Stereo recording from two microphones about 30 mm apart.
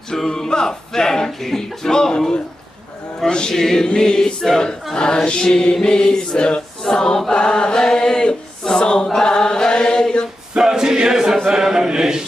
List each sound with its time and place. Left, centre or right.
0.3 s music: left
3.3 s music: left
3.5 s chant: centre
3.8 s music: left
4.9 s music: left
6.8 s choir: left
7.2 s chant: left
10.6 s chant: right